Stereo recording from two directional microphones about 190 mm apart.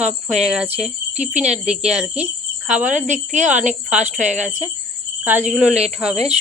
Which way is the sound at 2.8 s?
40° right (ahead or behind).